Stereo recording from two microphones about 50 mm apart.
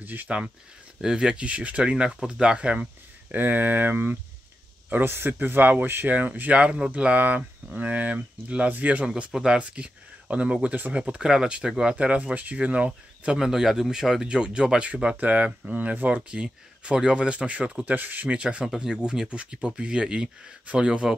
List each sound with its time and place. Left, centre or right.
0.0 s speech: right
1.0 s speech: centre
2.0 s speech: centre
3.3 s a man's voice: right
6.5 s speech: right
9.3 s speech: centre
9.6 s speech: right
13.4 s a man's voice: centre; by 16.2 s right
16.2 s speech: centre
17.8 s a man's voice: right
18.3 s speech: centre